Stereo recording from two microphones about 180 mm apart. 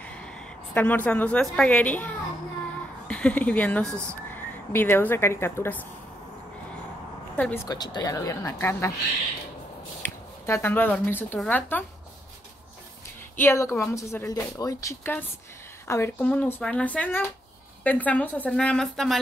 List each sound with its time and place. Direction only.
0.0 s a woman's voice: 5° left (ahead or behind)
3.1 s a woman's voice: 5° left (ahead or behind)
7.3 s a woman's voice: 5° left (ahead or behind)
7.6 s speech: 20° left (ahead or behind)
10.0 s speech: 15° left (ahead or behind)
13.4 s speech: 15° left (ahead or behind)